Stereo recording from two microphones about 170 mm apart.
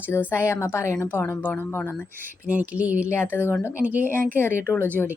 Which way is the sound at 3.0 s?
15° left (ahead or behind).